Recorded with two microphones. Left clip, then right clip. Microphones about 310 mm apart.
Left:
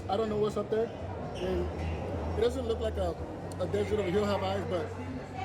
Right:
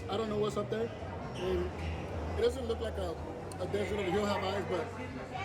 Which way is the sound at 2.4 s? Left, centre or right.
Centre.